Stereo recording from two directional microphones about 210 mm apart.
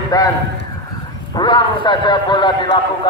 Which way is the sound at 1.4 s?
20° left (ahead or behind).